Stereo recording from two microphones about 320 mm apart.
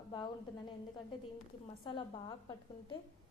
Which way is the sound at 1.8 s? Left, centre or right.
Centre.